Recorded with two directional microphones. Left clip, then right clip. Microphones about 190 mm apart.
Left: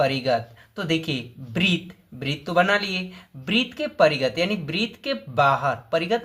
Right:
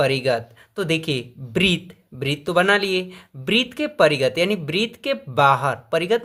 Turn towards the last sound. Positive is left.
turn(degrees=-35)  # may be behind; listen again after turning